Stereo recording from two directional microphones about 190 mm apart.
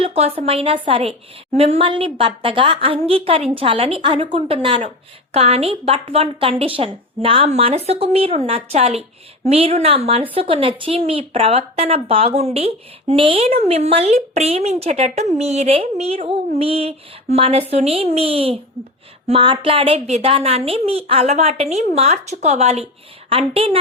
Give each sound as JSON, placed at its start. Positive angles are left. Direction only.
{"t": 0.0, "sound": "a woman's voice", "side_deg": -30}